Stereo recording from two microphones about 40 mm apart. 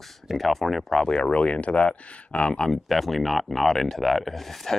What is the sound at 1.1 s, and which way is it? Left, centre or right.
Speech, left.